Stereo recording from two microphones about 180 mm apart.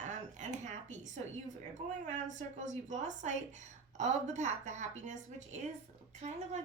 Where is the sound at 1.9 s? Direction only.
40° right (ahead or behind).